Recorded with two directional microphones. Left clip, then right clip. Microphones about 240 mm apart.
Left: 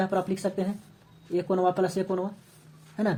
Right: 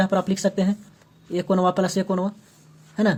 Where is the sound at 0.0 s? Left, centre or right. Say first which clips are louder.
Right 5 dB; right.